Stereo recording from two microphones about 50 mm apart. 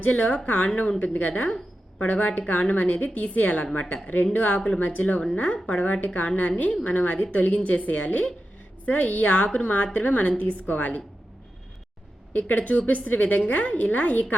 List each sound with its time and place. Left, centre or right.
0.0 s a woman's voice: left
12.3 s a woman's voice: left